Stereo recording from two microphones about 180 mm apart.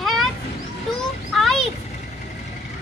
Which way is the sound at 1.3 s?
Centre (ahead or behind).